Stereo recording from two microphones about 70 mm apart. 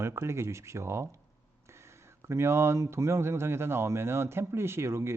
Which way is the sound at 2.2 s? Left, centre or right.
Right.